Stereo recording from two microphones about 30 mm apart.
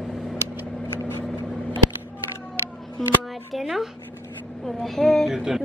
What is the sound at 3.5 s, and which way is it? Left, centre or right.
Speech, centre.